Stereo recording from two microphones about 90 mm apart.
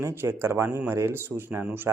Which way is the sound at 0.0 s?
25° right (ahead or behind).